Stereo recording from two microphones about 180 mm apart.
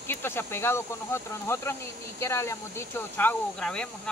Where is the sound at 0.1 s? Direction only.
10° left (ahead or behind).